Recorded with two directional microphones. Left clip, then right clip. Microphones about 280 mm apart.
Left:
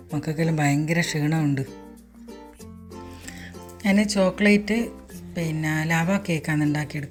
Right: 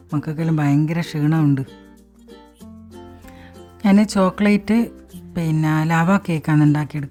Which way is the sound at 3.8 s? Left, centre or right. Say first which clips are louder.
Right 4 dB; centre.